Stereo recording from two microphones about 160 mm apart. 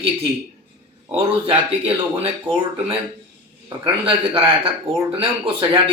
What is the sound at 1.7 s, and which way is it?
Speech, 35° right (ahead or behind).